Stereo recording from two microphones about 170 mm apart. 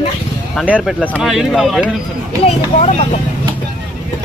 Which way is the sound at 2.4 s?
40° left (ahead or behind).